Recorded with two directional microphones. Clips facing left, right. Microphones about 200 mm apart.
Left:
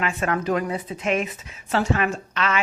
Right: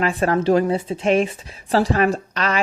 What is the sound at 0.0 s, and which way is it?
A woman's voice, 35° right (ahead or behind).